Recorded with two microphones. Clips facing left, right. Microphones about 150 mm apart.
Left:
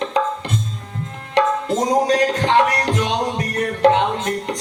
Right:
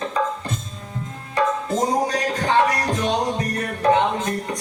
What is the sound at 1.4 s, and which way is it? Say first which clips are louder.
Music: left 3 dB; 80° left.